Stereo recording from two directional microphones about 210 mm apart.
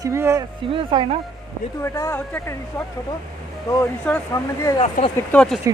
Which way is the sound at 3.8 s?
10° left (ahead or behind).